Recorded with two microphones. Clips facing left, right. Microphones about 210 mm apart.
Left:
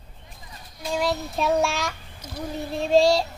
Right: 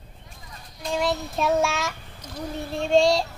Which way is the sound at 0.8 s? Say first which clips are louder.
Even; centre (ahead or behind).